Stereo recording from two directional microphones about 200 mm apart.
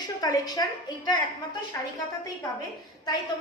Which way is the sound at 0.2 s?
20° left (ahead or behind).